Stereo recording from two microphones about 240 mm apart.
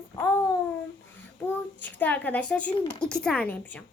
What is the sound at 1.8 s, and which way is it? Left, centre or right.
A woman's voice, centre.